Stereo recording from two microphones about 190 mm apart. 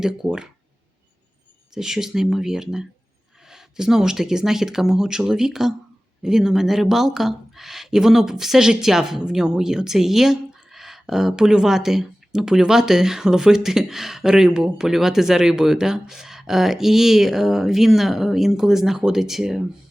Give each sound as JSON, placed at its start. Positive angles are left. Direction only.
{"t": 0.0, "sound": "speech", "side_deg": -5}
{"t": 1.7, "sound": "speech", "side_deg": -5}